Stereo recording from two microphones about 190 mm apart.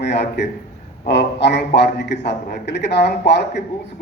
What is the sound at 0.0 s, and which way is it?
A man's voice, 65° left (ahead or behind).